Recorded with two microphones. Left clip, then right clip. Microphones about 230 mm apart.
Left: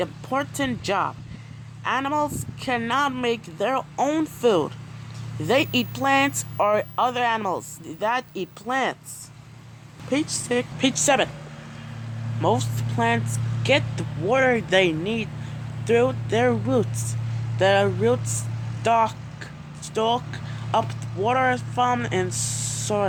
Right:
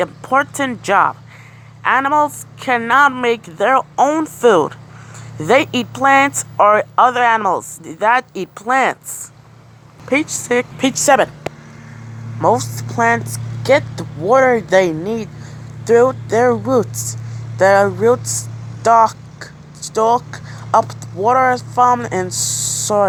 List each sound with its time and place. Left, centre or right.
0.0 s speech: centre
3.9 s a woman's voice: centre
4.4 s speech: centre
10.1 s a woman's voice: right
12.4 s speech: right
12.6 s speech: centre
13.9 s speech: right
14.8 s speech: right
15.9 s a woman's voice: right
17.6 s a woman's voice: right
19.9 s a woman's voice: right